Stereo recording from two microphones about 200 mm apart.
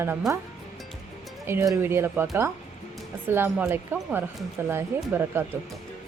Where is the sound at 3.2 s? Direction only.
10° right (ahead or behind).